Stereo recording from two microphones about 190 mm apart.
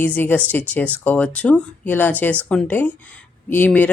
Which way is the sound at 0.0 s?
10° left (ahead or behind).